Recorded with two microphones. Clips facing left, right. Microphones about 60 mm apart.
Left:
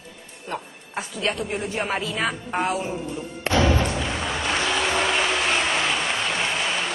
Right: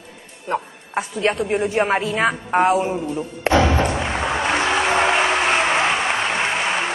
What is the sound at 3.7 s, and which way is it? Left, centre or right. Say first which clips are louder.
Music: right 4 dB; right.